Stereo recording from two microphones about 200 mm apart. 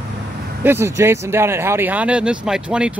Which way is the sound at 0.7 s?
15° right (ahead or behind).